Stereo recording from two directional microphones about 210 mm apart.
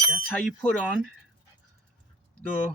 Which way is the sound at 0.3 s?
5° left (ahead or behind).